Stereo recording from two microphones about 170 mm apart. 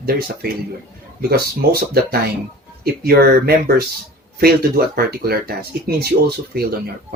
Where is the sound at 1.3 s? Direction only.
65° right (ahead or behind).